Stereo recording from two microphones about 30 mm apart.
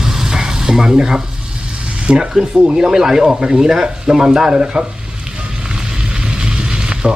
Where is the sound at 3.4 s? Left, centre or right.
Right.